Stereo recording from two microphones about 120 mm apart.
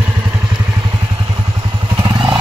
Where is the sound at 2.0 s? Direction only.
40° right (ahead or behind).